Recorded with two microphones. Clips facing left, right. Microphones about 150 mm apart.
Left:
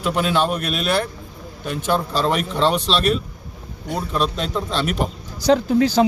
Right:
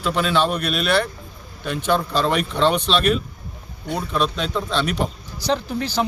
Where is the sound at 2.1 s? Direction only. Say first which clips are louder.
Even; 40° left (ahead or behind).